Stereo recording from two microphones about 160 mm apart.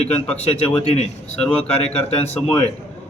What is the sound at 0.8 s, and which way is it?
Speech, 40° left (ahead or behind).